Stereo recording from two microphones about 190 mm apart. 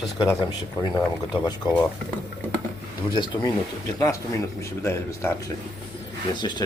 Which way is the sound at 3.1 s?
25° left (ahead or behind).